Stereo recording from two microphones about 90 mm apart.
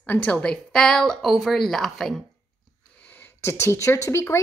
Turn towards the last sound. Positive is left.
turn(degrees=30)  # may be behind; listen again after turning